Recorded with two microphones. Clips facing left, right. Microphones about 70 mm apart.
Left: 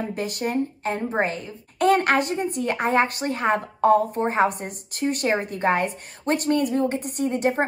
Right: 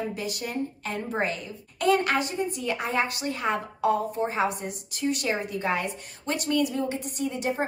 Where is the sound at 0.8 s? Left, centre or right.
Left.